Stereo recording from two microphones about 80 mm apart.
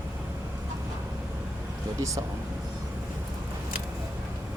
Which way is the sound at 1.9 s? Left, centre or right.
Right.